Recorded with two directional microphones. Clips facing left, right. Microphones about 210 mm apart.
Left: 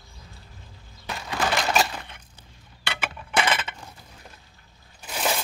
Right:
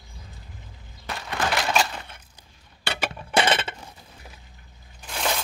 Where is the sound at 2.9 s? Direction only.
35° right (ahead or behind).